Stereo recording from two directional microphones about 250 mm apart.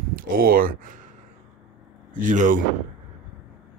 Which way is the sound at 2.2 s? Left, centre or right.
Right.